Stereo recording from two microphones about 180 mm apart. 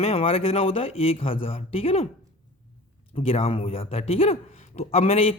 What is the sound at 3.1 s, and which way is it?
Speech, 35° left (ahead or behind).